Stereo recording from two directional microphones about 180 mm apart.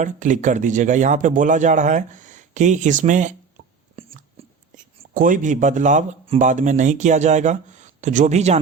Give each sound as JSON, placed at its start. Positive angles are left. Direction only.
{"t": 0.0, "sound": "speech", "side_deg": -45}
{"t": 4.0, "sound": "a sound", "side_deg": -35}
{"t": 5.1, "sound": "speech", "side_deg": -50}